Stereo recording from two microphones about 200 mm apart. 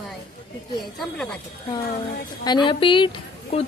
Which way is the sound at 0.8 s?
Centre (ahead or behind).